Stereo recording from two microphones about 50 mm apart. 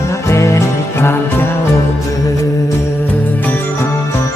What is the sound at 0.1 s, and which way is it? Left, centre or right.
Music, left.